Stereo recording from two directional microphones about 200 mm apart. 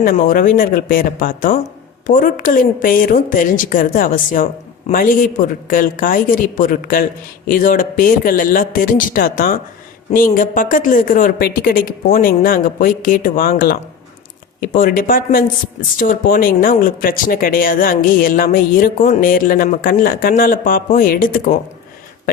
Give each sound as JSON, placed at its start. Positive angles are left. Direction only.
{"t": 0.0, "sound": "speech", "side_deg": 45}